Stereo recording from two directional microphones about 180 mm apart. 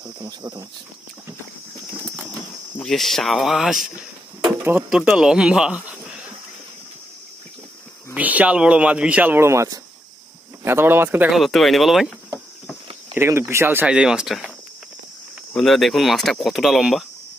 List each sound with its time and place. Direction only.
0.0 s speech: 20° right (ahead or behind)
2.8 s speech: centre (ahead or behind)
8.1 s speech: 10° right (ahead or behind)
13.1 s speech: 15° right (ahead or behind)
15.5 s speech: centre (ahead or behind)